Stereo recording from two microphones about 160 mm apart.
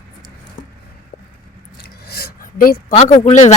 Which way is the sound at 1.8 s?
85° left.